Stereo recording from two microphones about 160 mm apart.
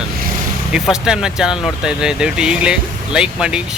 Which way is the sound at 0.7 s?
5° right (ahead or behind).